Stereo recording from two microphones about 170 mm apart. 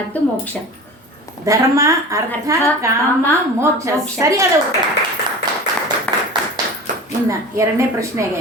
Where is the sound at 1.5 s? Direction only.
20° right (ahead or behind).